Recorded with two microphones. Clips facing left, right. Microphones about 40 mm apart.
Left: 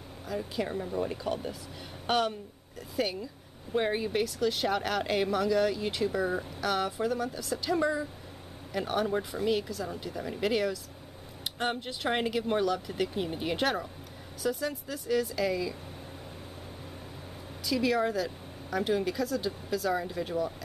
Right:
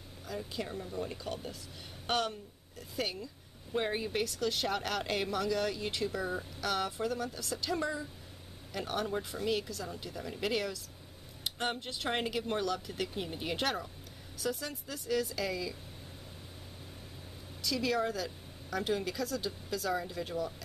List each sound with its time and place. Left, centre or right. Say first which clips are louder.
0.3 s speech: left 5 dB; centre
0.7 s speech: left 7 dB; left
1.1 s speech: left 7 dB; centre
17.6 s speech: left 4 dB; centre